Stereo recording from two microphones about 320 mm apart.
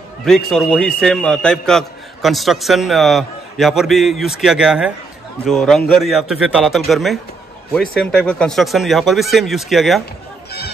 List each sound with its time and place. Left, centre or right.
0.2 s a man's voice: centre